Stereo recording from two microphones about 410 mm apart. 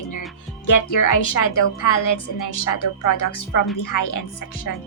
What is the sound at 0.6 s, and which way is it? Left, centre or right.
Speech, left.